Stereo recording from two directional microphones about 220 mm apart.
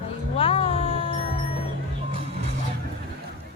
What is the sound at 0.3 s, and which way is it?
Music, 25° left (ahead or behind).